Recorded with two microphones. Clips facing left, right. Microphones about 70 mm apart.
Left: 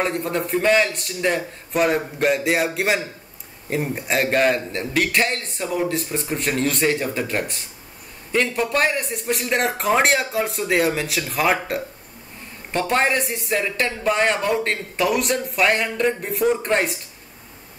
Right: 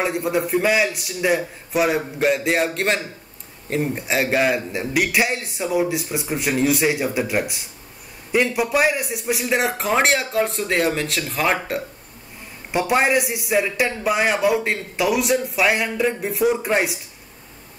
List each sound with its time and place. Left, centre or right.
0.0 s a man's voice: centre
12.7 s speech: centre